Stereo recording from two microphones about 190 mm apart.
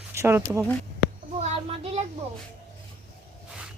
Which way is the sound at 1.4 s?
30° right (ahead or behind).